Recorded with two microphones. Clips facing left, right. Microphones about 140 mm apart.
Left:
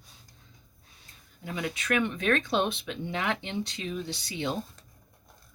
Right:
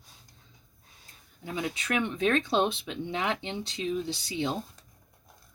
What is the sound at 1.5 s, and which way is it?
Speech, 25° right (ahead or behind).